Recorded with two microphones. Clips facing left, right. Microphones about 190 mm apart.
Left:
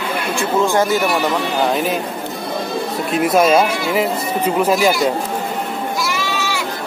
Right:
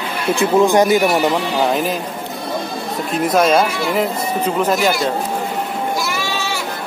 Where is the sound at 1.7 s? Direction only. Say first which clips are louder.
Even; centre (ahead or behind).